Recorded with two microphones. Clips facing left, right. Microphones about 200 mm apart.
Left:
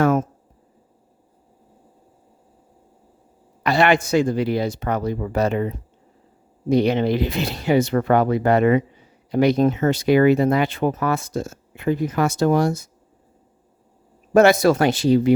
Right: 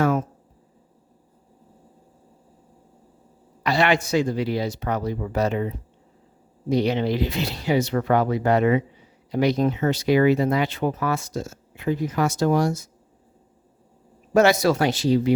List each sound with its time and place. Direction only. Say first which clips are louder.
0.0 s a sound: left 3 dB; 45° left (ahead or behind)
3.6 s speech: left 3 dB; 55° left (ahead or behind)
14.3 s speech: left 4 dB; 55° left (ahead or behind)